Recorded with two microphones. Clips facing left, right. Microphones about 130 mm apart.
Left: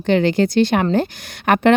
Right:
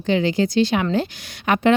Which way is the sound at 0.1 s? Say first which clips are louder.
Left 3 dB; 60° left (ahead or behind).